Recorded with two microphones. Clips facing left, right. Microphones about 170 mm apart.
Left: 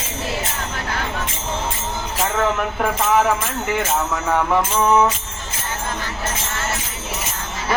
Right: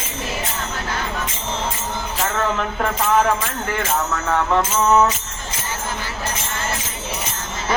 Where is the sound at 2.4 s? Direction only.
10° left (ahead or behind).